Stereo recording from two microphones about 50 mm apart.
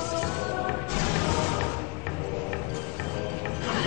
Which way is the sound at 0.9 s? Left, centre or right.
Centre.